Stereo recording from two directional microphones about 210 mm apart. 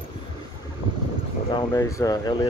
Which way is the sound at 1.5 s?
15° left (ahead or behind).